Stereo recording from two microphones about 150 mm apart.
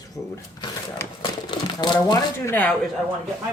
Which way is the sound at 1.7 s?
30° left (ahead or behind).